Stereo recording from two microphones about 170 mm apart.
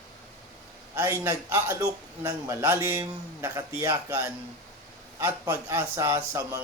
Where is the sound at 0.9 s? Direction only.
20° right (ahead or behind).